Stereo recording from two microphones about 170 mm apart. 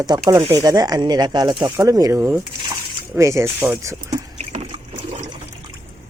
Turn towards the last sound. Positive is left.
turn(degrees=-20)  # may be behind; listen again after turning